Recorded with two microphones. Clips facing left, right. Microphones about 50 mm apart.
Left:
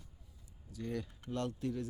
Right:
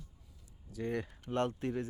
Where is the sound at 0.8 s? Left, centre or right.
Right.